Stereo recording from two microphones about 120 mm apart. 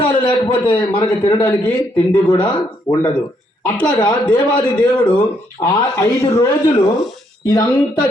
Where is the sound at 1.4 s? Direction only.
15° left (ahead or behind).